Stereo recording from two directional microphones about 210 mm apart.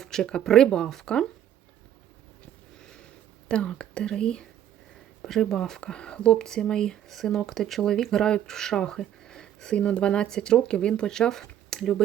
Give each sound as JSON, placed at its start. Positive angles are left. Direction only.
{"t": 0.0, "sound": "speech", "side_deg": 5}
{"t": 3.5, "sound": "speech", "side_deg": 5}